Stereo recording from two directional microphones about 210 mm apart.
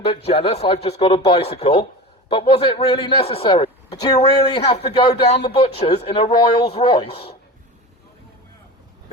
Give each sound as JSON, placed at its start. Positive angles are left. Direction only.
{"t": 0.3, "sound": "speech", "side_deg": 30}
{"t": 5.1, "sound": "speech", "side_deg": 50}
{"t": 5.5, "sound": "speech", "side_deg": 30}